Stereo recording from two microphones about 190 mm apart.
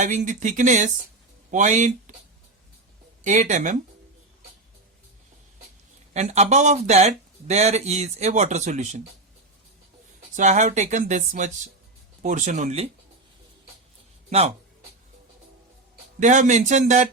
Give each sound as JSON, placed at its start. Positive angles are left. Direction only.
{"t": 0.0, "sound": "speech", "side_deg": -40}
{"t": 3.2, "sound": "speech", "side_deg": -40}
{"t": 6.1, "sound": "speech", "side_deg": -35}
{"t": 10.3, "sound": "speech", "side_deg": -40}
{"t": 14.3, "sound": "speech", "side_deg": -35}
{"t": 16.2, "sound": "speech", "side_deg": -40}